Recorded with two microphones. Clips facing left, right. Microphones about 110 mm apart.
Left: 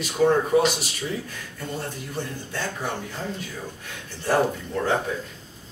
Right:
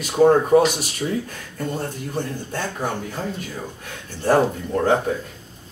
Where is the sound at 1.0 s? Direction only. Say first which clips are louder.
Right 6 dB; 30° right (ahead or behind).